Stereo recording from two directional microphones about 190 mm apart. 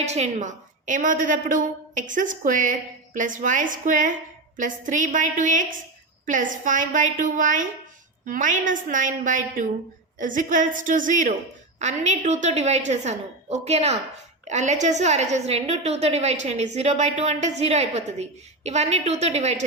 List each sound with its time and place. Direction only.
0.0 s a woman's voice: 35° right (ahead or behind)